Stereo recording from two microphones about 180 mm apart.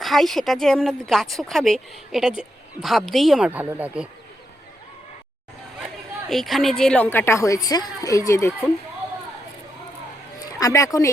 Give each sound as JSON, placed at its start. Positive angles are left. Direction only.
{"t": 0.0, "sound": "speech", "side_deg": 0}
{"t": 6.2, "sound": "a woman's voice", "side_deg": 0}
{"t": 10.6, "sound": "a woman's voice", "side_deg": 20}